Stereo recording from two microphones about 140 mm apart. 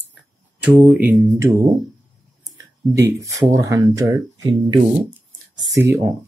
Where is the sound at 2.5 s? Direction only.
20° right (ahead or behind).